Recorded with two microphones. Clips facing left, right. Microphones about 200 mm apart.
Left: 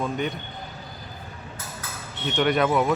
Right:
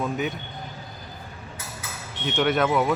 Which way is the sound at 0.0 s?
5° right (ahead or behind).